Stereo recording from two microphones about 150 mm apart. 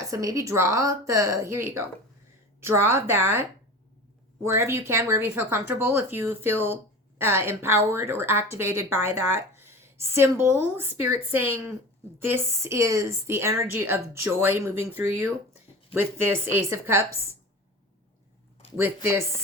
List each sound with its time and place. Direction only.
0.0 s a woman's voice: 20° right (ahead or behind)
4.4 s a woman's voice: 20° right (ahead or behind)